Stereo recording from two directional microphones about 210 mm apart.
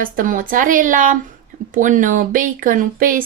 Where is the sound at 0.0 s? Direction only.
40° right (ahead or behind).